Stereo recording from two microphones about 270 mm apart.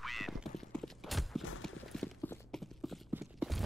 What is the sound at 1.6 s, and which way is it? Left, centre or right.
Clip-clop, centre.